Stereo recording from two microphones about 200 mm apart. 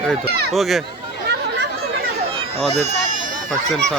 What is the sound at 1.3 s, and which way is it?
Chatter, 60° right (ahead or behind).